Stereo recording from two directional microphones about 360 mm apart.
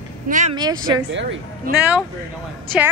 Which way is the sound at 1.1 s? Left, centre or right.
Right.